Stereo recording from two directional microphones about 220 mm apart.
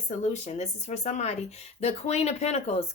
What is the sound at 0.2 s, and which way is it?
Speech, 30° left (ahead or behind).